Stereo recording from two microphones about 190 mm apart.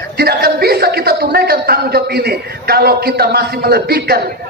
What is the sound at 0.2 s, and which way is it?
Speech, 55° right (ahead or behind).